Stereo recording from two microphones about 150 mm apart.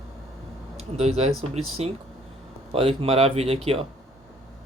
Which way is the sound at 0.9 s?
45° right (ahead or behind).